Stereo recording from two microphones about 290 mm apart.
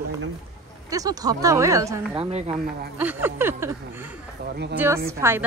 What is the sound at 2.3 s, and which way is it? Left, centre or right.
Speech, right.